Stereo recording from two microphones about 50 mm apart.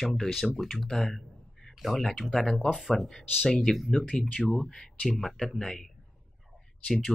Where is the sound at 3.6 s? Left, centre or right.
Centre.